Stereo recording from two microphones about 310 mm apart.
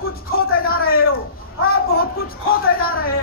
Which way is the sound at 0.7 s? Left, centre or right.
Left.